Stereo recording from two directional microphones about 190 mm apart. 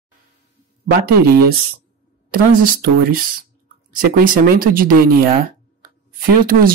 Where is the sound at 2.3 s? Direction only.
50° right (ahead or behind).